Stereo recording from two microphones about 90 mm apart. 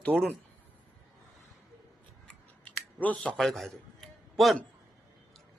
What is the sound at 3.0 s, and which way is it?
Speech, 15° left (ahead or behind).